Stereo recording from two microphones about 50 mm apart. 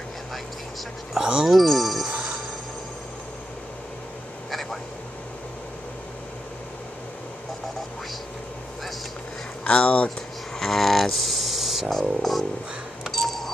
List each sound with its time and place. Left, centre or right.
1.1 s speech: centre
1.5 s speech: centre
4.5 s a sound: centre
9.7 s speech: left
10.6 s a sound: centre
12.2 s music: centre
13.0 s cash register: centre